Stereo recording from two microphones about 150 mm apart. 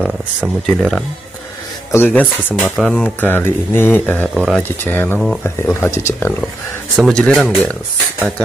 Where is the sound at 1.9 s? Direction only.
15° left (ahead or behind).